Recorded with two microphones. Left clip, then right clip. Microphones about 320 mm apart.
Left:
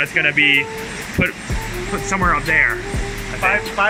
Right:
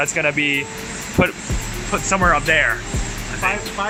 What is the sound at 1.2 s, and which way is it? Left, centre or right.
Speech, right.